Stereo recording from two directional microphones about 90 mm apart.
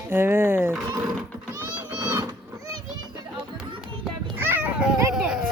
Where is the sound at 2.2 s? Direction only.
45° right (ahead or behind).